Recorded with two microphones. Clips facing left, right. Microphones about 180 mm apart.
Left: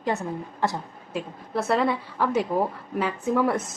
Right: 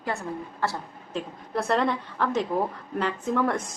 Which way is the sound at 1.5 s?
5° left (ahead or behind).